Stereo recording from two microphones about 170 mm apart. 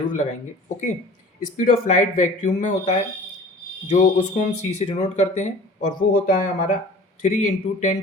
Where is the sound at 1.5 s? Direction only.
50° left (ahead or behind).